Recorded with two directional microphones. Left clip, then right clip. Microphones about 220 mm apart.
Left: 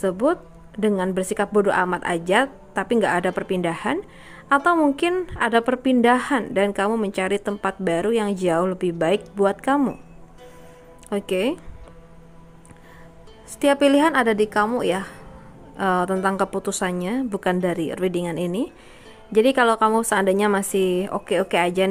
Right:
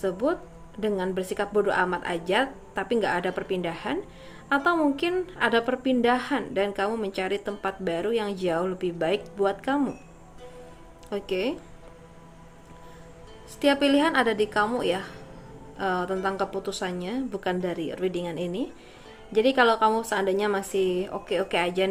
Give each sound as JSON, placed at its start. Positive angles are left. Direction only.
{"t": 0.0, "sound": "speech", "side_deg": 45}
{"t": 11.1, "sound": "speech", "side_deg": 45}
{"t": 13.6, "sound": "speech", "side_deg": 45}